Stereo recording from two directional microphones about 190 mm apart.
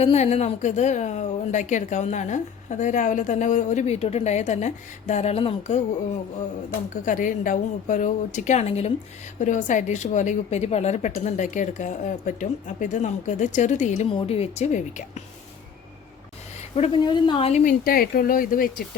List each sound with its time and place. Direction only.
0.0 s a woman's voice: 35° left (ahead or behind)
6.9 s a woman's voice: 45° left (ahead or behind)
16.7 s a woman's voice: 35° left (ahead or behind); by 18.9 s 50° left (ahead or behind)